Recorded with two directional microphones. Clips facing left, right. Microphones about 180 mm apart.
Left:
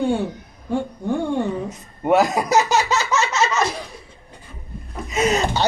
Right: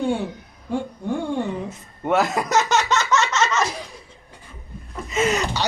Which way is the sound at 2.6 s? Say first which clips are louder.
Left 1 dB; 35° left (ahead or behind).